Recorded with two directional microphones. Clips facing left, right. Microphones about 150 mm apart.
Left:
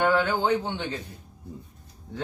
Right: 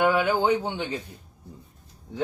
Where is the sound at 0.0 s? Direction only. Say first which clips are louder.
Right 1 dB; 10° right (ahead or behind).